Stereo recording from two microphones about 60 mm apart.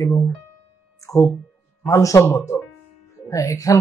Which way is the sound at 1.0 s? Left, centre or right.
Left.